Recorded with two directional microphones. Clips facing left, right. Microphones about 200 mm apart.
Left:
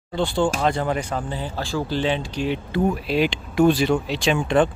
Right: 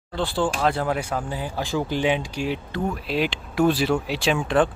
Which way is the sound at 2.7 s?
5° left (ahead or behind).